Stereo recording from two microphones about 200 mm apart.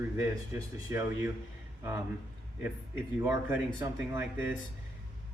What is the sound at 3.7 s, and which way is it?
Speech, 10° right (ahead or behind).